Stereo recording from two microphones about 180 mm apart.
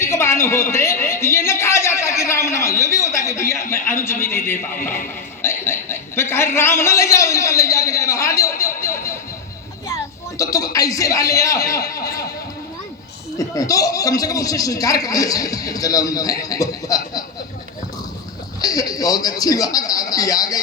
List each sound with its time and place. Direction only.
0.0 s a man's voice: 15° left (ahead or behind)
13.3 s a man's voice: 20° left (ahead or behind)
18.6 s a man's voice: 20° left (ahead or behind)